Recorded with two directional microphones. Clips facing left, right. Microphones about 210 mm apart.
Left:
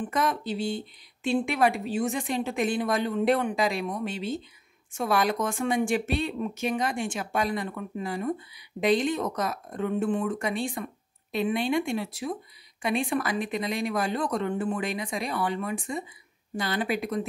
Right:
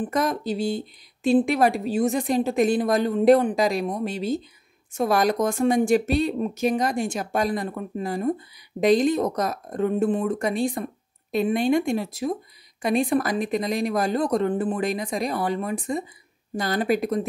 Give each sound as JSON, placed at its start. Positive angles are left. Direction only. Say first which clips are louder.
{"t": 0.0, "sound": "speech", "louder": "right 4 dB", "side_deg": -40}